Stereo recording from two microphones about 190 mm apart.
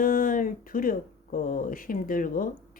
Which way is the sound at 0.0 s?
45° left (ahead or behind).